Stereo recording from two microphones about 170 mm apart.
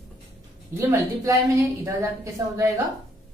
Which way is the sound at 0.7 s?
20° right (ahead or behind).